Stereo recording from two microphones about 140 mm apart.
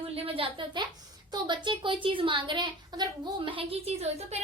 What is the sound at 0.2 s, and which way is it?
A woman's voice, 40° right (ahead or behind).